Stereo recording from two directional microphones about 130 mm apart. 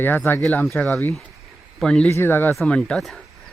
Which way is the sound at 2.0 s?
15° left (ahead or behind).